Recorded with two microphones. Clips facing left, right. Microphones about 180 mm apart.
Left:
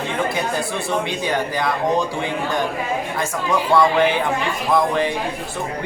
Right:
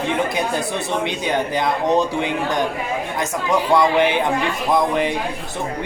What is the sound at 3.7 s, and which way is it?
Speech, 20° right (ahead or behind).